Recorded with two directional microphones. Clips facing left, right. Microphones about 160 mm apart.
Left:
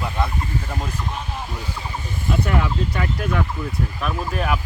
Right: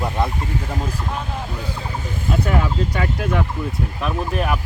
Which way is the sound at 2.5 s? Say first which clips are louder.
Right 2 dB; 10° right (ahead or behind).